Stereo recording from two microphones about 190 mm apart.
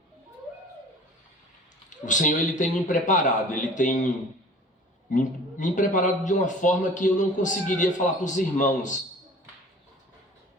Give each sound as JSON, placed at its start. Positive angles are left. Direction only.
{"t": 1.9, "sound": "a man's voice", "side_deg": 40}
{"t": 5.1, "sound": "a man's voice", "side_deg": 40}